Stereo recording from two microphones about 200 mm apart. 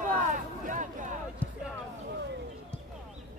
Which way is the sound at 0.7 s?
40° right (ahead or behind).